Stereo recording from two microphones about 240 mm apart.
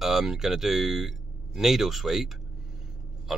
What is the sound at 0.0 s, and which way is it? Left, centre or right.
Speech, centre.